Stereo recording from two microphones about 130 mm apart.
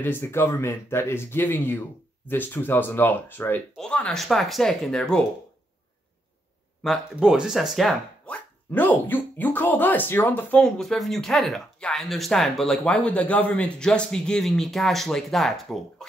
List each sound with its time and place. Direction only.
0.0 s speech: 15° left (ahead or behind)
6.8 s speech: centre (ahead or behind)
8.7 s speech: 15° left (ahead or behind)